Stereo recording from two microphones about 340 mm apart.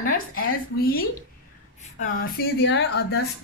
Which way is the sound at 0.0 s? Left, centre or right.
Left.